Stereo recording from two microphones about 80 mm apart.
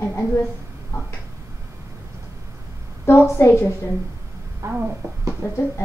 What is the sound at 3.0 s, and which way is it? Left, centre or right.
Speech, left.